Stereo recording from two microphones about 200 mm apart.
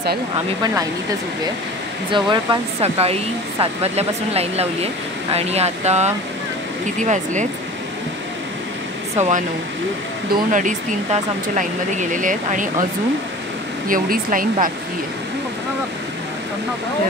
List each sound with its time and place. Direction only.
2.0 s speech: 25° right (ahead or behind)
9.1 s speech: 35° right (ahead or behind)
10.5 s speech: 40° right (ahead or behind)
13.8 s speech: 45° right (ahead or behind)